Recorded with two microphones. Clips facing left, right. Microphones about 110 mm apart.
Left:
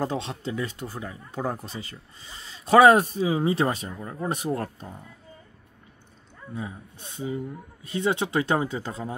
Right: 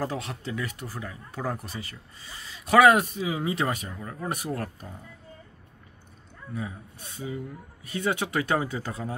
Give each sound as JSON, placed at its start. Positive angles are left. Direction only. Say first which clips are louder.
{"t": 0.0, "sound": "speech", "louder": "left 3 dB", "side_deg": 25}
{"t": 6.5, "sound": "speech", "louder": "even", "side_deg": 25}